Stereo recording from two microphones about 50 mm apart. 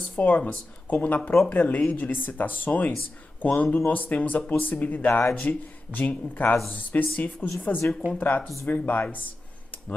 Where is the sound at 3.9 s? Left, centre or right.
Left.